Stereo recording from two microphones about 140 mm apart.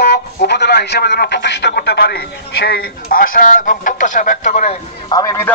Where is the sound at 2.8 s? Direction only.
90° left; by 4.8 s 50° left (ahead or behind).